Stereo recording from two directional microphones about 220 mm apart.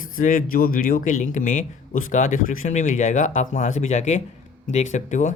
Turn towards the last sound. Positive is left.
turn(degrees=35)  # may be behind; listen again after turning